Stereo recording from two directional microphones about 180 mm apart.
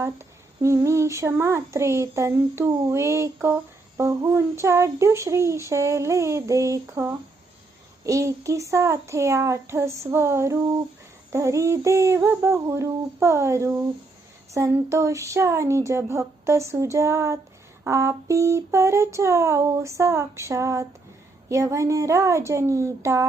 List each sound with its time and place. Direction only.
0.6 s a child's voice: 15° right (ahead or behind)